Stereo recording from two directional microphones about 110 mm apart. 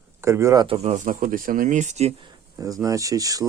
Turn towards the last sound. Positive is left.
turn(degrees=-35)  # may be behind; listen again after turning